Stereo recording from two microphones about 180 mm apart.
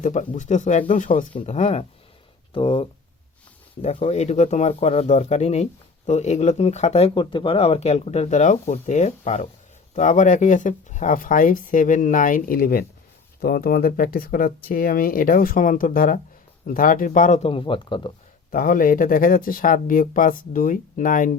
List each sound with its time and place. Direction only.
0.0 s speech: 45° left (ahead or behind); by 18.1 s 25° left (ahead or behind)
18.5 s speech: 50° left (ahead or behind)